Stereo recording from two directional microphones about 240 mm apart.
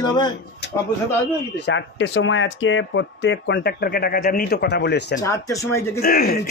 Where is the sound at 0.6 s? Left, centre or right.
Left.